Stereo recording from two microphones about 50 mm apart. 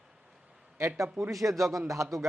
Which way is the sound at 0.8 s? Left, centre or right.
Right.